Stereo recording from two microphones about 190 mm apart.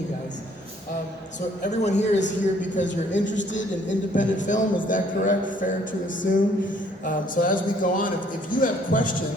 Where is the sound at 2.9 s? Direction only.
70° left (ahead or behind).